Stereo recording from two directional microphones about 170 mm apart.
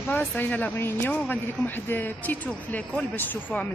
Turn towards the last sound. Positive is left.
turn(degrees=10)  # may be behind; listen again after turning